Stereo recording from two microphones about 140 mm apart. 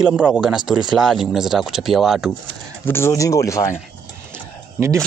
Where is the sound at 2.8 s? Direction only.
15° left (ahead or behind).